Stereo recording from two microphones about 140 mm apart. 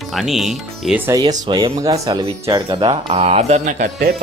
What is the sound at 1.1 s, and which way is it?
Speech, 30° right (ahead or behind).